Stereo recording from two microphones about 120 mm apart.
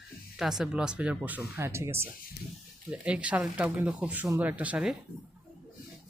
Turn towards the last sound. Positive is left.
turn(degrees=-10)  # may be behind; listen again after turning